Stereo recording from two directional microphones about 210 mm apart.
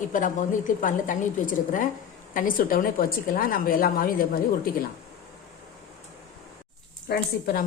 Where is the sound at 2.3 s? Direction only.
40° left (ahead or behind).